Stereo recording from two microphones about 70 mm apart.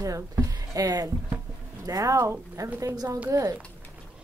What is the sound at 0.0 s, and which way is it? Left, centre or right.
A woman's voice, right.